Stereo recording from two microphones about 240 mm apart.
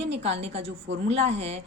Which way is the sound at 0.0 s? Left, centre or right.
Right.